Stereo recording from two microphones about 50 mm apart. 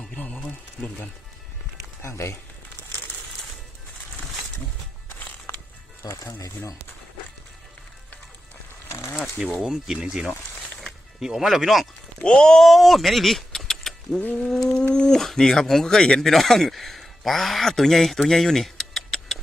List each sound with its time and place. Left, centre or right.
0.2 s a sound: left
0.8 s music: centre
2.0 s speech: left
6.0 s music: left
9.1 s a sound: centre
9.6 s speech: centre
12.3 s speech: centre
12.6 s vehicle: centre
14.3 s a man's voice: centre